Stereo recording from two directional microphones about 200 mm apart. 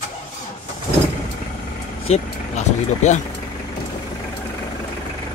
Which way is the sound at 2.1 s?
35° left (ahead or behind).